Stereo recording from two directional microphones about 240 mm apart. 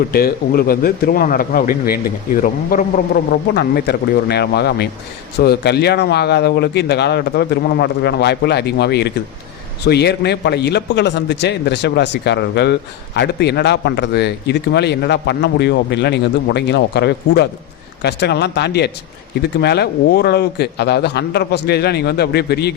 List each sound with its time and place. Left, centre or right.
0.1 s a man's voice: left